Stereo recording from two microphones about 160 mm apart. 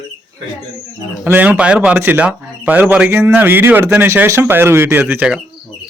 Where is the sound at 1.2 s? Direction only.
10° right (ahead or behind).